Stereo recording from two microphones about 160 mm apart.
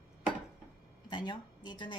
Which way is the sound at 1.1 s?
25° left (ahead or behind).